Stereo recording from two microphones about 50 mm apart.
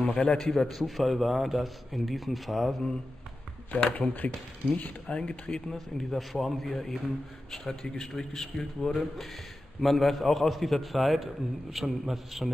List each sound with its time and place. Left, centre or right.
0.1 s a man's voice: centre
3.7 s speech: left
5.1 s speech: left
5.5 s a man's voice: centre
6.1 s a man's voice: centre